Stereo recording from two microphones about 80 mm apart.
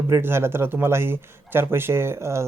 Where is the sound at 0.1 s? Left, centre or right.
Right.